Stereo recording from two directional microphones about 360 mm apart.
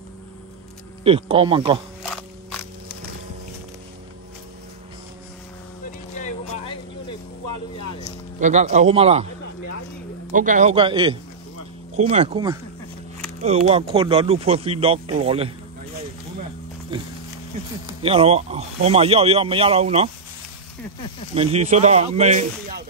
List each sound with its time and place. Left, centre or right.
1.0 s speech: centre
6.1 s vehicle: centre
8.0 s speech: centre
10.3 s speech: right
16.9 s speech: centre
21.4 s speech: centre